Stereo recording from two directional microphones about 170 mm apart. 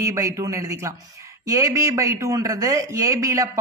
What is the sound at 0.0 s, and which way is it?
A man's voice, 20° right (ahead or behind).